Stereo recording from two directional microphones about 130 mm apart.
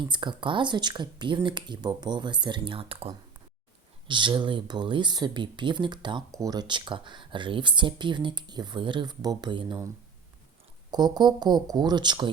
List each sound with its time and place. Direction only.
0.0 s speech: 35° right (ahead or behind)
4.1 s speech: 40° right (ahead or behind)
10.9 s speech: 30° right (ahead or behind)